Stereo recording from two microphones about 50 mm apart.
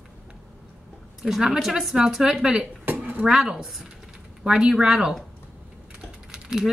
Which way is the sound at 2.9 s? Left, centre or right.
Right.